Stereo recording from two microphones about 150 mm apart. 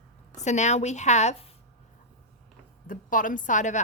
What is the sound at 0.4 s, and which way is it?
Speech, 50° left (ahead or behind).